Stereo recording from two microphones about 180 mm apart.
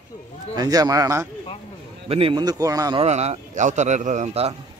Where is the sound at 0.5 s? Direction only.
20° right (ahead or behind).